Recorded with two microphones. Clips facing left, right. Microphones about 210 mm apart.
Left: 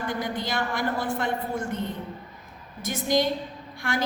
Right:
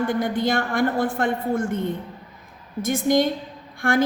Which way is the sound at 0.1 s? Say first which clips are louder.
Right 7 dB; 50° right (ahead or behind).